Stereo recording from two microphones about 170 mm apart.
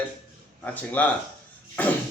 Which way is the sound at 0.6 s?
10° left (ahead or behind).